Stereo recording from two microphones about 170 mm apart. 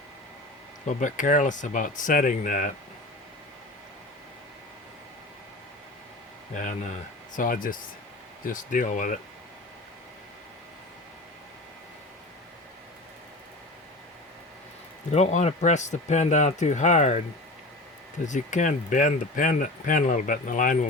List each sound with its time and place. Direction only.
0.9 s speech: 45° left (ahead or behind)
6.5 s speech: 45° left (ahead or behind)
15.1 s speech: 40° left (ahead or behind)
18.3 s speech: 45° left (ahead or behind)